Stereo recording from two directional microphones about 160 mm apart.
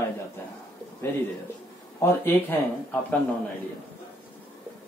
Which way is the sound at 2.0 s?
15° left (ahead or behind).